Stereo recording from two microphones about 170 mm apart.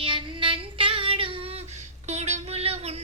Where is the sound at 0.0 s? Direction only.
30° right (ahead or behind).